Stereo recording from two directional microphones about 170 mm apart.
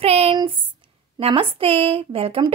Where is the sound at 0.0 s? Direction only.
35° right (ahead or behind).